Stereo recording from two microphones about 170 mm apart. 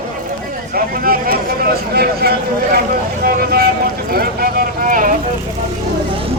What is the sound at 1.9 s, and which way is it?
Speech, 65° right (ahead or behind).